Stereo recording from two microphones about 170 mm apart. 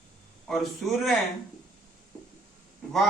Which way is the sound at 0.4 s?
Centre (ahead or behind).